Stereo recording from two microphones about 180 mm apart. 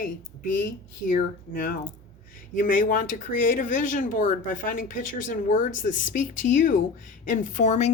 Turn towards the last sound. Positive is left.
turn(degrees=40)  # may be behind; listen again after turning